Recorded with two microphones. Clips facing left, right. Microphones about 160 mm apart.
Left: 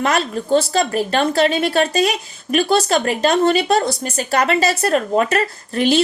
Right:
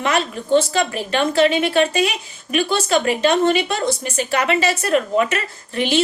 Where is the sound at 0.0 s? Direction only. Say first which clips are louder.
Left 2 dB; 40° left (ahead or behind).